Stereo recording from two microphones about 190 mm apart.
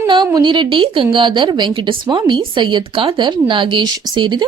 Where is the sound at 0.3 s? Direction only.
20° right (ahead or behind).